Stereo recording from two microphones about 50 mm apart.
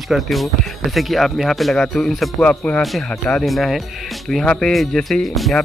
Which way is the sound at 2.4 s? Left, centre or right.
Left.